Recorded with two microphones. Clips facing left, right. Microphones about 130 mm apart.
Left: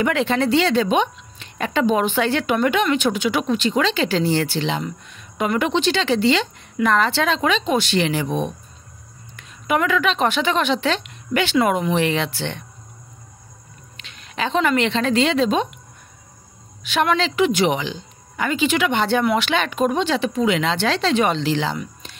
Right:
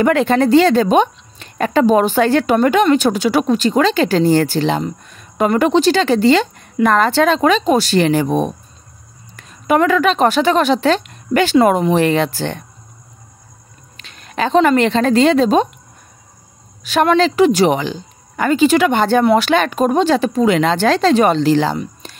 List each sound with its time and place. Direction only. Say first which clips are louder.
0.0 s a woman's voice: right 6 dB; 45° right (ahead or behind)
13.9 s a woman's voice: right 6 dB; 40° right (ahead or behind)
16.8 s speech: right 7 dB; 40° right (ahead or behind)